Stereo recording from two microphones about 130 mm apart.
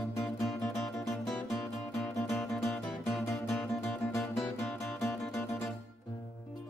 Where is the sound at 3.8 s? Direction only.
20° left (ahead or behind).